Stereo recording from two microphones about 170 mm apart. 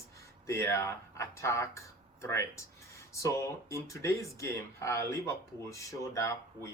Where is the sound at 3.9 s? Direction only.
20° left (ahead or behind).